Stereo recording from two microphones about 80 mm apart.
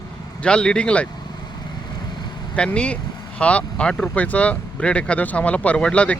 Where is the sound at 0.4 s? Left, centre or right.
Centre.